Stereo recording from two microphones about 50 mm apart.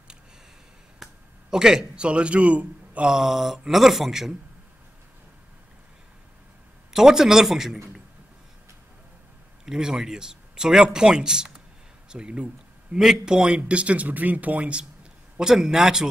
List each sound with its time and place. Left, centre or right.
1.0 s a sound: centre
1.5 s a man's voice: centre
2.0 s a man's voice: right
3.1 s speech: centre
6.9 s speech: centre
9.7 s a man's voice: centre
13.6 s speech: right
15.3 s speech: centre